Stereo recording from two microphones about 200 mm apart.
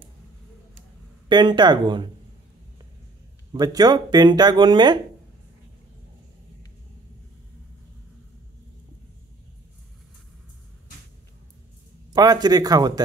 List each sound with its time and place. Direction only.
1.3 s speech: 20° right (ahead or behind)
3.5 s speech: 20° right (ahead or behind)
12.1 s speech: 20° right (ahead or behind)